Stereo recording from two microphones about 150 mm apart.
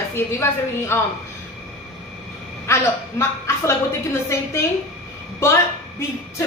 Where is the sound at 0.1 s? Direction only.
15° left (ahead or behind).